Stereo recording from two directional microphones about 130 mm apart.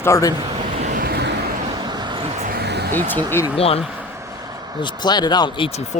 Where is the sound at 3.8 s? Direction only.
10° right (ahead or behind); by 4.8 s 30° right (ahead or behind).